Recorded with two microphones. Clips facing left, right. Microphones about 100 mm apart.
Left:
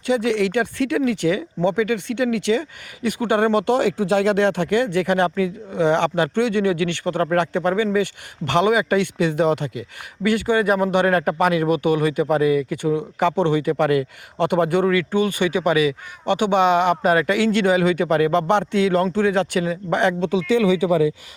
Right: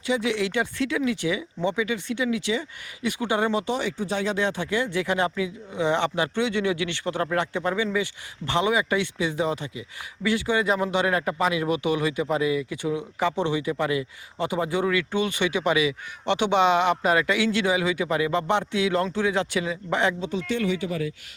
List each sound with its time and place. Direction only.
0.0 s speech: 55° left (ahead or behind)
7.1 s speech: 40° left (ahead or behind)
7.3 s speech: 55° left (ahead or behind)
10.2 s speech: 55° left (ahead or behind)
14.8 s speech: 45° left (ahead or behind); by 20.4 s 65° left (ahead or behind)